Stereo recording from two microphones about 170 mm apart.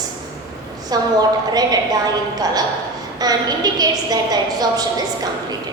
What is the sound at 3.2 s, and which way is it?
A woman's voice, 25° right (ahead or behind).